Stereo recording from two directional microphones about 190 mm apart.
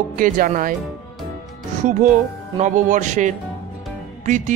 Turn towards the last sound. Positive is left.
turn(degrees=-40)  # may be behind; listen again after turning